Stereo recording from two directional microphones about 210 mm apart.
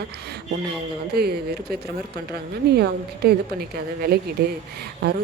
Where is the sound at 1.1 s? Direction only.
50° right (ahead or behind).